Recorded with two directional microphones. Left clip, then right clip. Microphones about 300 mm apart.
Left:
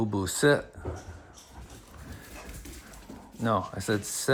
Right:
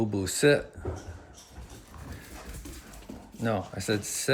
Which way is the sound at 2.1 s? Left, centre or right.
Centre.